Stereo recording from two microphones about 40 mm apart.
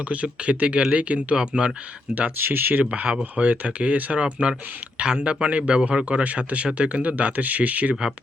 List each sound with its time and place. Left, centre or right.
0.1 s speech: right
2.4 s speech: right
2.9 s speech: right